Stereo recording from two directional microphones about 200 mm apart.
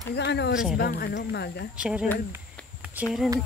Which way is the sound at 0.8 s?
50° left (ahead or behind).